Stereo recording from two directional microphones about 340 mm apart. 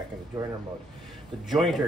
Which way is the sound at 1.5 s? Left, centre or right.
Centre.